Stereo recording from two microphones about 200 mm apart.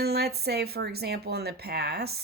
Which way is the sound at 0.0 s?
55° right (ahead or behind).